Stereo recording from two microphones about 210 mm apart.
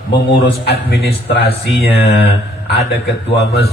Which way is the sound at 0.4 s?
50° left (ahead or behind).